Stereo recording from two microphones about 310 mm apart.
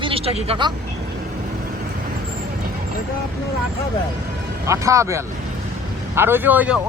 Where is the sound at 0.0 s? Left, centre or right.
Centre.